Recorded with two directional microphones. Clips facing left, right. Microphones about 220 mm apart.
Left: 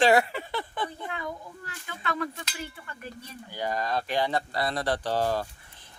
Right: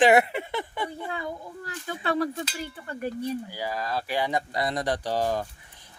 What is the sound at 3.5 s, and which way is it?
A man's voice, 5° right (ahead or behind).